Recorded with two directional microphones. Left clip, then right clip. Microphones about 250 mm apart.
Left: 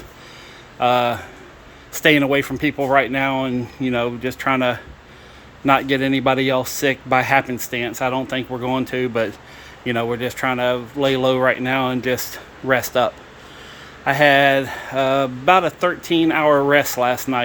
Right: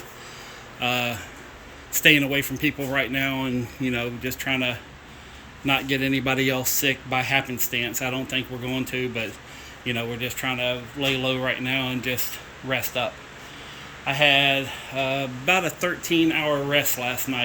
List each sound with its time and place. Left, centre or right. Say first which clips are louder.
0.8 s speech: left 8 dB; centre
14.1 s speech: left 6 dB; left